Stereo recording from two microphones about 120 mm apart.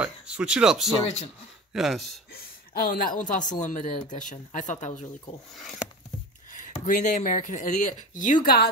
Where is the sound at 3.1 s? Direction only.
90° left.